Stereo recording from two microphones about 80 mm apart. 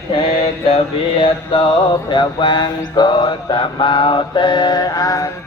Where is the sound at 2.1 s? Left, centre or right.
Left.